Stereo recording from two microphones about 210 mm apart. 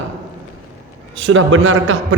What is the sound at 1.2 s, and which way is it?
Speech, 70° right (ahead or behind).